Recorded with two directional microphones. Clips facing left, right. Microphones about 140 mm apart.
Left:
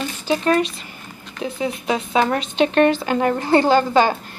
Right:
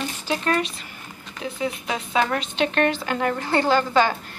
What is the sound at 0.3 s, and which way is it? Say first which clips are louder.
A woman's voice: left 6 dB; 25° left (ahead or behind).